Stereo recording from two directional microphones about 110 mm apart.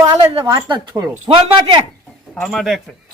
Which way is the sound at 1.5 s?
45° right (ahead or behind).